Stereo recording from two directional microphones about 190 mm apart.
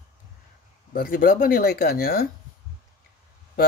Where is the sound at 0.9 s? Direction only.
50° left (ahead or behind).